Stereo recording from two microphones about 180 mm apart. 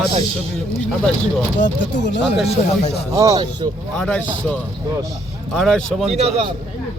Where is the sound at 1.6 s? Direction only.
80° left.